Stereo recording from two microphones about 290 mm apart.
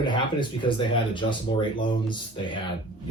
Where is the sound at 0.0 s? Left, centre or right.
Centre.